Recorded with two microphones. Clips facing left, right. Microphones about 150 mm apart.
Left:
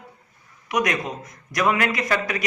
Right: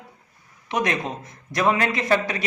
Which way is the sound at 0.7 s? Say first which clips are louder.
Left 1 dB; 30° right (ahead or behind).